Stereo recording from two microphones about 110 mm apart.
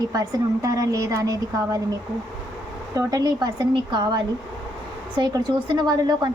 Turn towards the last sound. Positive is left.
turn(degrees=-40)  # may be behind; listen again after turning